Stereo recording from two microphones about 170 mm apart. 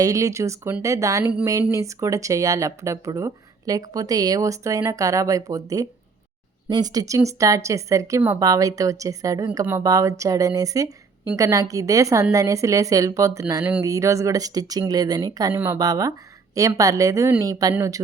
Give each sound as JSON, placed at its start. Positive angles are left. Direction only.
{"t": 0.0, "sound": "speech", "side_deg": -20}